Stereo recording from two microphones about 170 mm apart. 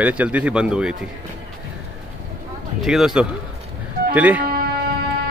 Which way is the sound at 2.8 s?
5° right (ahead or behind).